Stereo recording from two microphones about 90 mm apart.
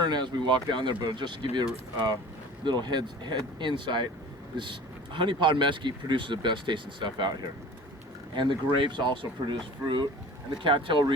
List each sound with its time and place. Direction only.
0.0 s speech: 55° right (ahead or behind)
2.6 s speech: 55° right (ahead or behind)
8.4 s speech: 60° right (ahead or behind)